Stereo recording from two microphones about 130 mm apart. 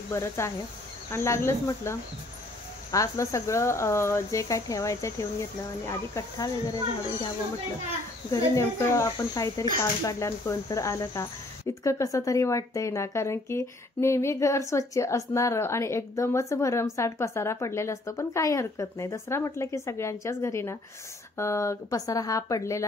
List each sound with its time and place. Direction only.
0.1 s speech: 20° left (ahead or behind)
8.3 s speech: 25° left (ahead or behind)